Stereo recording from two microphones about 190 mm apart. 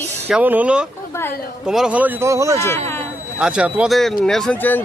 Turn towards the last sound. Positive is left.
turn(degrees=10)  # may be behind; listen again after turning